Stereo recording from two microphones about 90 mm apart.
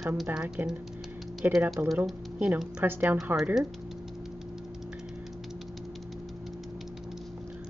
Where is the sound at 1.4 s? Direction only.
20° right (ahead or behind).